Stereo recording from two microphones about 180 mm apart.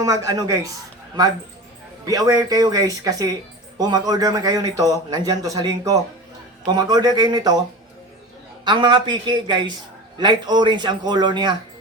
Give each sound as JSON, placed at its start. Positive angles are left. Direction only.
{"t": 0.0, "sound": "a man's voice", "side_deg": -20}
{"t": 2.0, "sound": "a man's voice", "side_deg": -20}
{"t": 8.6, "sound": "a man's voice", "side_deg": -25}